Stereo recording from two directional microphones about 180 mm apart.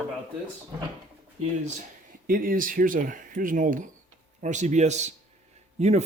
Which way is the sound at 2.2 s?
50° right (ahead or behind).